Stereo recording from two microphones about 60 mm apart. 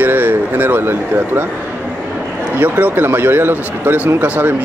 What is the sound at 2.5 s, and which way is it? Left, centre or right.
Speech, right.